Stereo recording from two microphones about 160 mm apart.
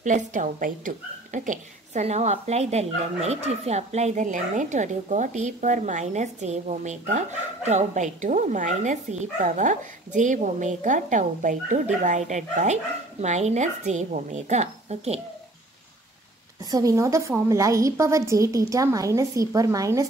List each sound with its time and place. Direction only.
0.0 s speech: 50° right (ahead or behind)
16.7 s a woman's voice: 20° right (ahead or behind)